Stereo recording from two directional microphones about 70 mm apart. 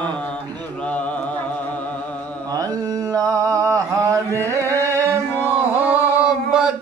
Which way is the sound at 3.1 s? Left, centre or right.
Right.